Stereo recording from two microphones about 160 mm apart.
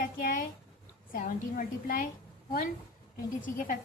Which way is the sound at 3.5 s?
60° left (ahead or behind).